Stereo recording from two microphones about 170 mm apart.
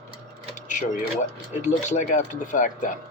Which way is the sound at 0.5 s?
45° left (ahead or behind).